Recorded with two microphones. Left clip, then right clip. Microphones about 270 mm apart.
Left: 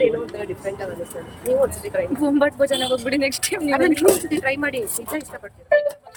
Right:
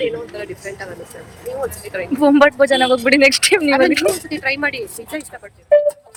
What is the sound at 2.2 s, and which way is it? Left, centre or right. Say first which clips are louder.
Speech: right 9 dB; centre.